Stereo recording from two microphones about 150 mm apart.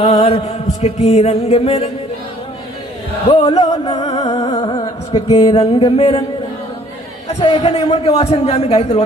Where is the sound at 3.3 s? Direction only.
30° left (ahead or behind).